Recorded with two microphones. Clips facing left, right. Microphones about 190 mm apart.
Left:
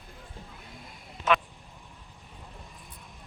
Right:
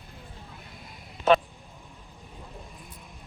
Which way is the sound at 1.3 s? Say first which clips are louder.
Right 5 dB; 30° right (ahead or behind).